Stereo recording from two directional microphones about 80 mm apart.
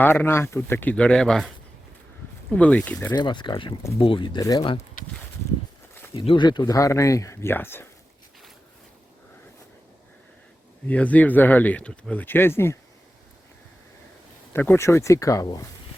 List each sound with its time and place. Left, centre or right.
0.0 s speech: left
0.9 s speech: centre
2.5 s speech: centre
3.1 s speech: left
6.1 s speech: left
6.7 s speech: left
7.5 s speech: left
10.8 s speech: centre
11.9 s speech: centre
12.2 s speech: left
14.5 s speech: left
14.8 s speech: left